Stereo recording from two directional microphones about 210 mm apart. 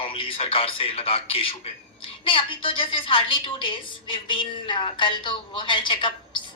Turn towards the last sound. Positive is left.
turn(degrees=25)  # may be behind; listen again after turning